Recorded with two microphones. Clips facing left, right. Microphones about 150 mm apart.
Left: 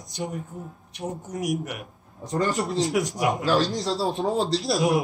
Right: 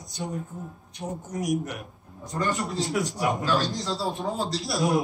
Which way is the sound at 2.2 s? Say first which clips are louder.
Left 3 dB; 20° left (ahead or behind).